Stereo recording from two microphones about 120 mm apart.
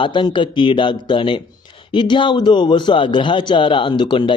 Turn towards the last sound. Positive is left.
turn(degrees=45)  # may be behind; listen again after turning